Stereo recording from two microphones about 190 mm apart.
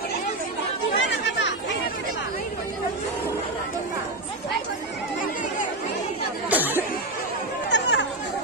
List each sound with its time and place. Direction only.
0.9 s chatter: 70° left (ahead or behind)
6.5 s a sound: 10° right (ahead or behind)
7.7 s chatter: 65° left (ahead or behind)